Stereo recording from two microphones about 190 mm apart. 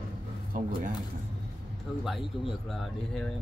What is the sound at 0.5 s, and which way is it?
Speech, 45° right (ahead or behind).